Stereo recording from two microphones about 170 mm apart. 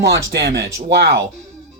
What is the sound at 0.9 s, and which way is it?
Speech, 65° right (ahead or behind).